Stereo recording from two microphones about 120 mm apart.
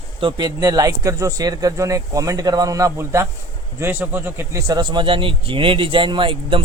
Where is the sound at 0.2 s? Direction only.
40° right (ahead or behind); by 4.6 s 20° right (ahead or behind).